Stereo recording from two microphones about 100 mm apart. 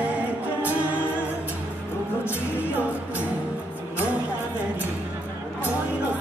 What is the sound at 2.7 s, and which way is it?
Music, 15° right (ahead or behind).